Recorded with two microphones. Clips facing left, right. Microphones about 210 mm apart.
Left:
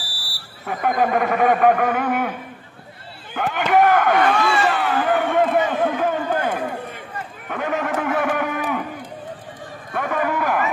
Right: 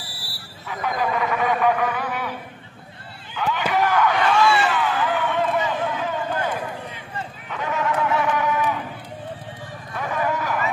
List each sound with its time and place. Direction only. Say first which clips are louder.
0.7 s speech: left 5 dB; 50° left (ahead or behind)
3.3 s chop: left 5 dB; 55° left (ahead or behind)
7.4 s a sound: left 2 dB; 55° left (ahead or behind)
9.9 s run: left 3 dB; 55° left (ahead or behind)